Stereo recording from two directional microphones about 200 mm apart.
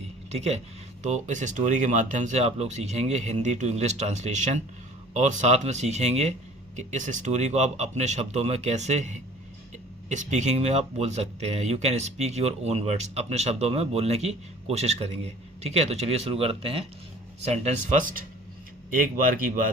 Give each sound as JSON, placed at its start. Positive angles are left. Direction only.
{"t": 0.3, "sound": "speech", "side_deg": -35}